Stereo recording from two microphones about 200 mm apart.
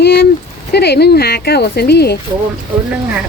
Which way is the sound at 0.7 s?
55° left (ahead or behind).